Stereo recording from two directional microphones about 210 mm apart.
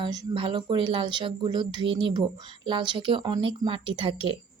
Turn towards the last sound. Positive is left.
turn(degrees=-25)  # may be behind; listen again after turning